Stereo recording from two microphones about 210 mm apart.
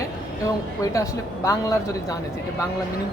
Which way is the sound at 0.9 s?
15° left (ahead or behind).